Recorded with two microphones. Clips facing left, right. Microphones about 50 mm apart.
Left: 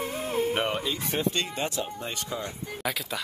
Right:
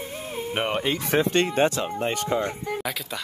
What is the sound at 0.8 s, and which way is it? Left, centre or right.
Speech, right.